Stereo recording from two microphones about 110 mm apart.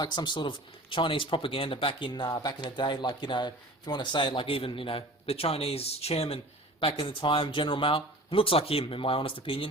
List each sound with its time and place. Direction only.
0.0 s speech: 40° left (ahead or behind)